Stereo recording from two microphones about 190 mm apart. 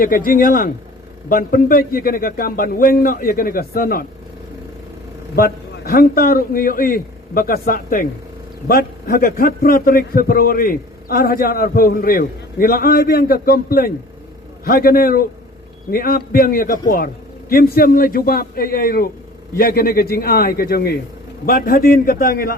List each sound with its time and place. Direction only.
0.0 s a man's voice: 50° left (ahead or behind)
5.4 s a man's voice: 50° left (ahead or behind)